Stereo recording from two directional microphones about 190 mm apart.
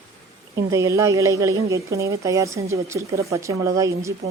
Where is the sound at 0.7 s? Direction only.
15° right (ahead or behind).